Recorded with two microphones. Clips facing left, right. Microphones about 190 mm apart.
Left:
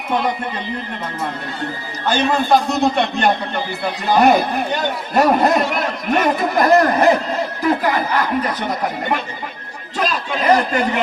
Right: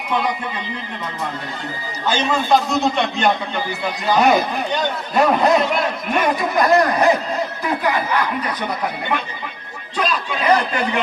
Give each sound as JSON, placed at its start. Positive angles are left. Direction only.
{"t": 2.0, "sound": "a man's voice", "side_deg": 55}